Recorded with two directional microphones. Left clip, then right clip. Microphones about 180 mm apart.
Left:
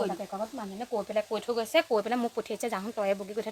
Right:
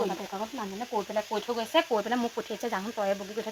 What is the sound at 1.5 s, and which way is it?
Speech, 30° left (ahead or behind).